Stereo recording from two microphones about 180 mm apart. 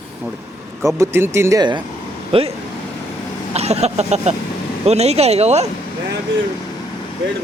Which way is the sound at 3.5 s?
35° right (ahead or behind).